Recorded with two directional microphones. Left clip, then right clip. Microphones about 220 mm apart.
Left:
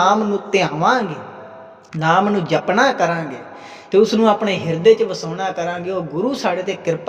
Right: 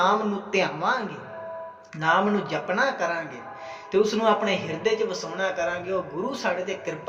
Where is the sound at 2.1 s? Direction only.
40° left (ahead or behind).